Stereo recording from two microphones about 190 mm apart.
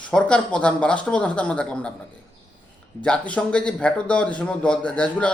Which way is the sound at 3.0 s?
5° left (ahead or behind).